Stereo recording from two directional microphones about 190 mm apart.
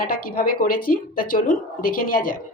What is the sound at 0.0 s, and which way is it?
Speech, 50° left (ahead or behind).